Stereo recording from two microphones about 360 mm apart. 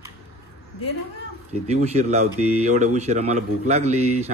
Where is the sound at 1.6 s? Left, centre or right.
Centre.